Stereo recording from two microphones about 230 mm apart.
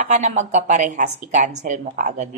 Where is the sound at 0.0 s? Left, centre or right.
Right.